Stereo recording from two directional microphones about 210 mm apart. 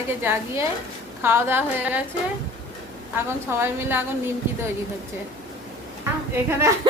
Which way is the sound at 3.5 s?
10° right (ahead or behind).